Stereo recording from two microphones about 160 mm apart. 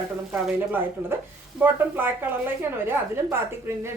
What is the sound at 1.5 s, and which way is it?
Speech, 10° right (ahead or behind).